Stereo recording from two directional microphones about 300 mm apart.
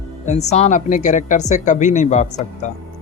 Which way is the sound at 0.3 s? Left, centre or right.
Left.